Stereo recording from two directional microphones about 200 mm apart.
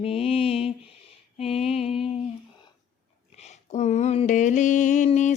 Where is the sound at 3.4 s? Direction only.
35° left (ahead or behind).